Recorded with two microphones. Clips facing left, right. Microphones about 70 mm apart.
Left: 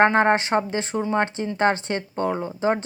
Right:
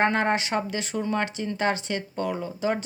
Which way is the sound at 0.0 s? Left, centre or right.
Left.